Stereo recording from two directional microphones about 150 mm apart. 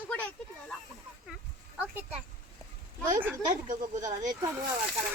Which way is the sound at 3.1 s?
15° right (ahead or behind).